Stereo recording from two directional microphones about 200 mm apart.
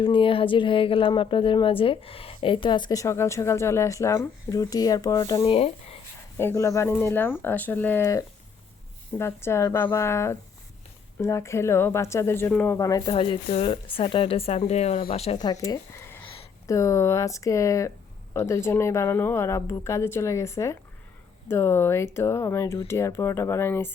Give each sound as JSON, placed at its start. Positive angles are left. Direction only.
{"t": 0.0, "sound": "a woman's voice", "side_deg": 25}
{"t": 5.5, "sound": "speech", "side_deg": 30}
{"t": 6.3, "sound": "a woman's voice", "side_deg": 10}